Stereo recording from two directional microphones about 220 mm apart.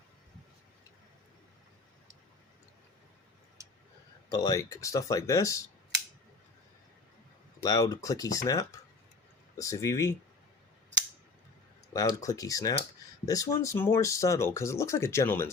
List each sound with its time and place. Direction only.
4.3 s speech: 15° left (ahead or behind)
7.6 s speech: 15° left (ahead or behind)
11.9 s speech: 15° left (ahead or behind)